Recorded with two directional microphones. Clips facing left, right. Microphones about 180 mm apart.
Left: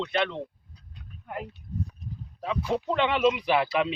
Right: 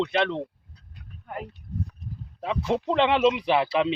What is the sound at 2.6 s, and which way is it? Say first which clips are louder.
Speech: right 3 dB; 25° right (ahead or behind).